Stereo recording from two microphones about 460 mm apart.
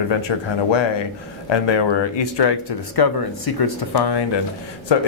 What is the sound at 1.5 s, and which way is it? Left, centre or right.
Speech, left.